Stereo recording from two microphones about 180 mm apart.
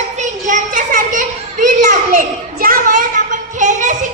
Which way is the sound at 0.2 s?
45° right (ahead or behind).